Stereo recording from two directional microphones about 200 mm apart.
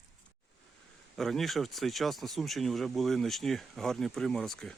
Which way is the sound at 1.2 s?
Centre (ahead or behind).